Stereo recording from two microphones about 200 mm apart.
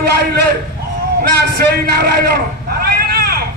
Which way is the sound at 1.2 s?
50° right (ahead or behind).